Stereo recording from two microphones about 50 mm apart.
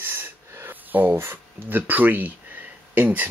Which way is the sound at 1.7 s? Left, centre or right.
Right.